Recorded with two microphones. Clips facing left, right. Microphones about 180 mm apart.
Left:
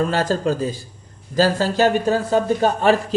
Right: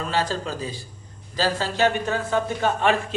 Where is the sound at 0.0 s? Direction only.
45° left (ahead or behind).